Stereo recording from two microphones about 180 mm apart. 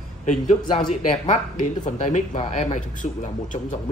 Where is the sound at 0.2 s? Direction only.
40° left (ahead or behind).